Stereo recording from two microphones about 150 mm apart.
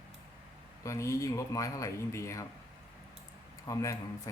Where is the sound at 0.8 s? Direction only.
20° left (ahead or behind).